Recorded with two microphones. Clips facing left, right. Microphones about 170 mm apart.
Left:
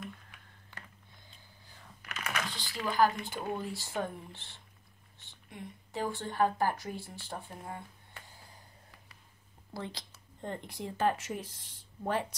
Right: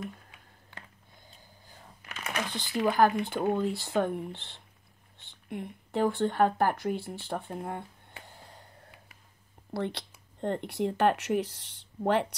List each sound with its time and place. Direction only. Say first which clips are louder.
2.0 s computer keyboard: right 1 dB; 25° right (ahead or behind)
2.8 s speech: right 4 dB; 55° right (ahead or behind)
8.3 s a sound: right 5 dB; 65° right (ahead or behind)
9.8 s speech: right 8 dB; 65° right (ahead or behind)